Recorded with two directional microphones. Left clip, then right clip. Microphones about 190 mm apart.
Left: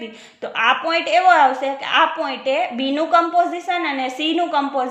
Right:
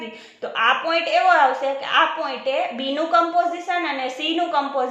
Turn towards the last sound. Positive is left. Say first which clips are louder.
# left 2 dB
turn(degrees=35)  # may be behind; listen again after turning